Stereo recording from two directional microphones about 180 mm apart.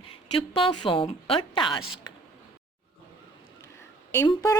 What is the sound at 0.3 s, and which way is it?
Speech, 30° left (ahead or behind).